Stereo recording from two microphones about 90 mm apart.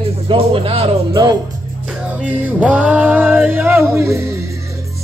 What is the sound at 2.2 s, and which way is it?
Music, 15° right (ahead or behind).